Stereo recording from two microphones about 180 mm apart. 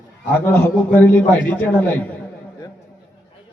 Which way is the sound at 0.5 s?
10° left (ahead or behind).